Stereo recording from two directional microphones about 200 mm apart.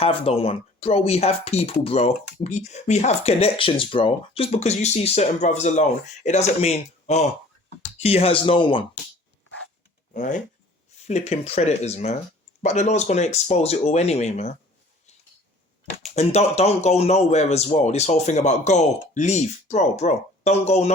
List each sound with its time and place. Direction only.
0.0 s speech: 30° left (ahead or behind)
10.2 s speech: 40° left (ahead or behind)
16.1 s speech: 35° left (ahead or behind)